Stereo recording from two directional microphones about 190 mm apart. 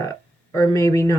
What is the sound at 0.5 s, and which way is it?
Speech, 15° left (ahead or behind).